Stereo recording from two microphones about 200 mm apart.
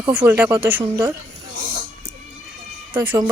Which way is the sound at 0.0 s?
10° right (ahead or behind).